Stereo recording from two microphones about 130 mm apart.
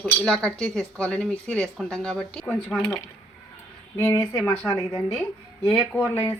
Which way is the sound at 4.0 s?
20° left (ahead or behind).